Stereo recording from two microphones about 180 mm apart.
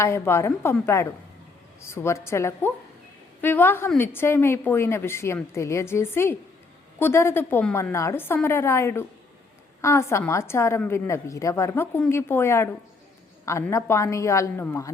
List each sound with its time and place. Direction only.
0.0 s a woman's voice: 15° left (ahead or behind)